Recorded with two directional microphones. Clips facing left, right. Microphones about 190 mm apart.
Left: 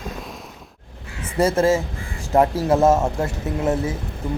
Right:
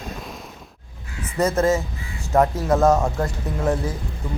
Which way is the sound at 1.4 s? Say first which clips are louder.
Left 2 dB; 30° left (ahead or behind).